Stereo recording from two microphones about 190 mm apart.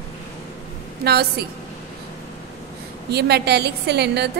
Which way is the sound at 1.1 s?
55° right (ahead or behind).